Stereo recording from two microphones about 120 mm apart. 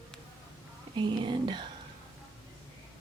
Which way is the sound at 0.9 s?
40° right (ahead or behind).